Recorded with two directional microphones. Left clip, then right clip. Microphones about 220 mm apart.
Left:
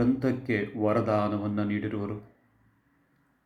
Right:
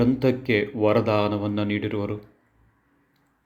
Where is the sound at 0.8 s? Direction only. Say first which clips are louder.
Right 4 dB; 50° right (ahead or behind).